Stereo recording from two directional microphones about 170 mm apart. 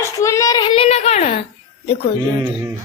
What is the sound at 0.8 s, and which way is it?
Speech, 40° left (ahead or behind).